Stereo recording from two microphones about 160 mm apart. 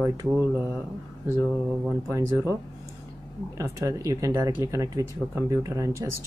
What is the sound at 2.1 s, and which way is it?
Speech, 20° right (ahead or behind).